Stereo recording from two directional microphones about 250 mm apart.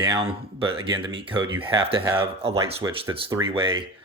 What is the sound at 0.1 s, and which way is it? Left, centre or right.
Speech, right.